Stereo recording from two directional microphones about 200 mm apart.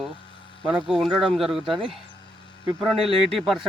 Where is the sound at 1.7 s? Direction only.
25° right (ahead or behind).